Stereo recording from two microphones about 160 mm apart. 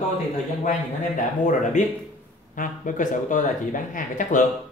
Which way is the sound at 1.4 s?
50° left (ahead or behind).